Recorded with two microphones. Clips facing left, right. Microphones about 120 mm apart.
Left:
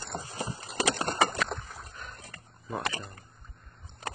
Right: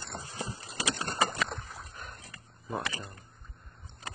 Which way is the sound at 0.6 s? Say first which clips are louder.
Left 7 dB; 65° left (ahead or behind).